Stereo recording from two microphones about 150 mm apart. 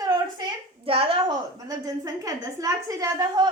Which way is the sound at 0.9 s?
40° right (ahead or behind).